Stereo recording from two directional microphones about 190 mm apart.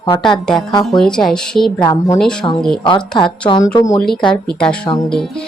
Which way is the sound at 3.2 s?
25° left (ahead or behind).